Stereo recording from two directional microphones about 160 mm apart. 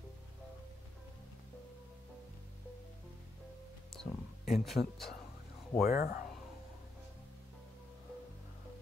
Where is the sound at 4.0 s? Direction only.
Centre (ahead or behind).